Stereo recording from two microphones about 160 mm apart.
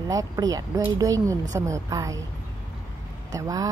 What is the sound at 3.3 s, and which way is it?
Speech, 20° right (ahead or behind).